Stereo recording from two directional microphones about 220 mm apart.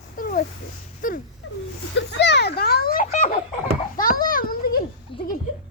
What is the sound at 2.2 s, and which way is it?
Children playing, 50° left (ahead or behind).